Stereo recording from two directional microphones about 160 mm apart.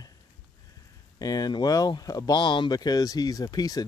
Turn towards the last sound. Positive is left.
turn(degrees=25)  # may be behind; listen again after turning